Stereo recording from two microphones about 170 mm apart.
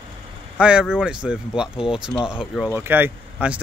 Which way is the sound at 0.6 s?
5° right (ahead or behind).